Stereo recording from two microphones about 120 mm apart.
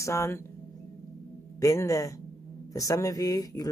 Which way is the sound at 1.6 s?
30° left (ahead or behind).